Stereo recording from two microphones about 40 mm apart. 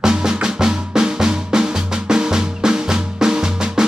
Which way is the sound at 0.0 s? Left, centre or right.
Centre.